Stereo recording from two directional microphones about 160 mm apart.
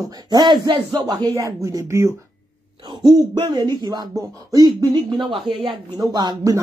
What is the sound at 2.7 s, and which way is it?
Speech, 30° right (ahead or behind).